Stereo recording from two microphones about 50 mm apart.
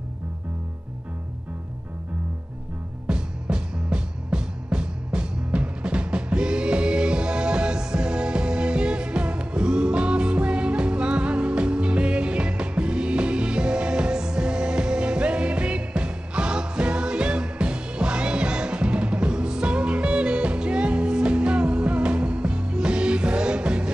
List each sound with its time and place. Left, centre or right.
3.1 s music: centre